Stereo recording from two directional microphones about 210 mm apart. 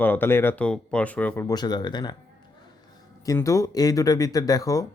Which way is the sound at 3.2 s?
15° left (ahead or behind).